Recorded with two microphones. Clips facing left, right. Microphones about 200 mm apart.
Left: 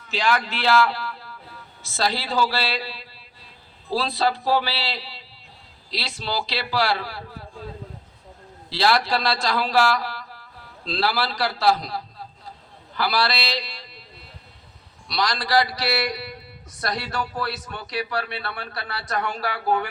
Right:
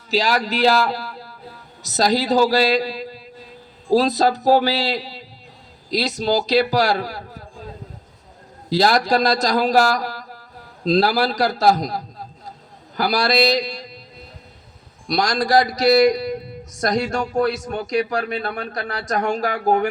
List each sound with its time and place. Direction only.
0.1 s a man's voice: 35° right (ahead or behind)
8.7 s a man's voice: 45° right (ahead or behind)
13.0 s a sound: 45° right (ahead or behind)
15.0 s a man's voice: 45° right (ahead or behind)